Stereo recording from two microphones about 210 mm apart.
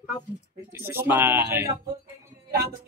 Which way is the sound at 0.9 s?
10° right (ahead or behind).